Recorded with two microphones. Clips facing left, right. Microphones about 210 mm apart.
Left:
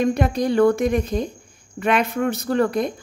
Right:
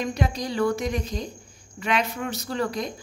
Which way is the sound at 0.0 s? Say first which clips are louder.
Left 8 dB; 55° left (ahead or behind).